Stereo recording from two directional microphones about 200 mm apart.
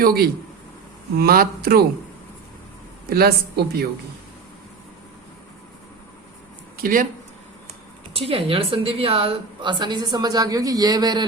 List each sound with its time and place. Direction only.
0.0 s speech: 50° right (ahead or behind)
3.1 s speech: 50° right (ahead or behind)
6.8 s speech: 45° right (ahead or behind)
8.1 s a woman's voice: 30° right (ahead or behind)